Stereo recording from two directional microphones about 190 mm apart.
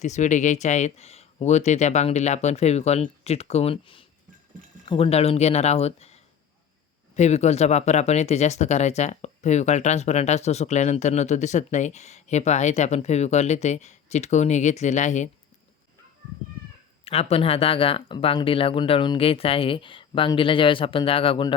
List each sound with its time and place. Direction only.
0.0 s speech: 40° left (ahead or behind)
7.2 s speech: 35° left (ahead or behind)
17.1 s speech: 35° left (ahead or behind)